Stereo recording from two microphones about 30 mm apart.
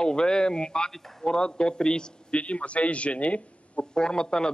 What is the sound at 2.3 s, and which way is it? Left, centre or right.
Speech, left.